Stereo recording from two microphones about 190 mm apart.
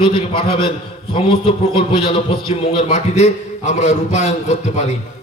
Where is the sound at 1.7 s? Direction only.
25° left (ahead or behind).